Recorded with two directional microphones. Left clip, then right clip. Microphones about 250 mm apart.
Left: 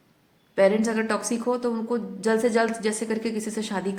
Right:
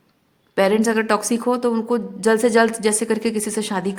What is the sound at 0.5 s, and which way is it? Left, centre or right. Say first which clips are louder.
A woman's voice: right 4 dB; right.